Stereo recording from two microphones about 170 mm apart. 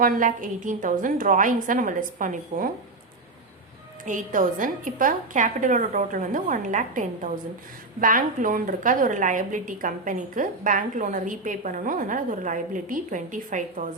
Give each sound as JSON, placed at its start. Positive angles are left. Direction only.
{"t": 0.0, "sound": "a woman's voice", "side_deg": -50}
{"t": 4.0, "sound": "a woman's voice", "side_deg": -50}